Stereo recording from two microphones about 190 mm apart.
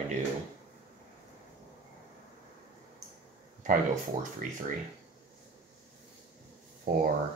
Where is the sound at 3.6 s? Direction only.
40° right (ahead or behind).